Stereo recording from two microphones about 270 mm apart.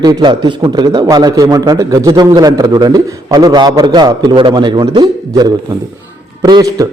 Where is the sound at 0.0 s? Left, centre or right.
Centre.